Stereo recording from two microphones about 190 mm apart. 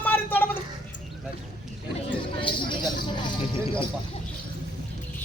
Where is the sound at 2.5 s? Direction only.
25° left (ahead or behind).